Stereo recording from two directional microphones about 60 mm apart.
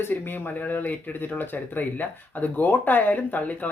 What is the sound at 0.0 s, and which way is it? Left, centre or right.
Speech, left.